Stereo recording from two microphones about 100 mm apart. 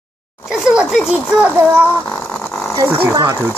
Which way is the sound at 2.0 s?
10° left (ahead or behind).